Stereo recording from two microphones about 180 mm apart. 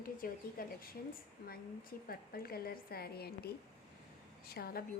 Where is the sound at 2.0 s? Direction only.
55° left (ahead or behind).